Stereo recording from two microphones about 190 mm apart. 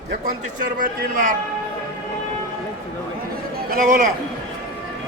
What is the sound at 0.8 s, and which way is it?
Speech, 45° right (ahead or behind).